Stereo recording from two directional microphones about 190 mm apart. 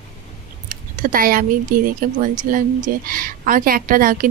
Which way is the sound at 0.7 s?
45° right (ahead or behind).